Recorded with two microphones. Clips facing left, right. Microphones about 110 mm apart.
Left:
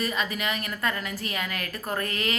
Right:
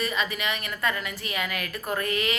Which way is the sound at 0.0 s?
40° left (ahead or behind).